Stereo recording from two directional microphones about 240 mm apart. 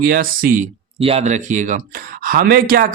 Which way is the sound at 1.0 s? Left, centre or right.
Right.